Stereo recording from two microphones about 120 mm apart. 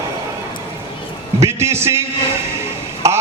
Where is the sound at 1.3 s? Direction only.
25° right (ahead or behind).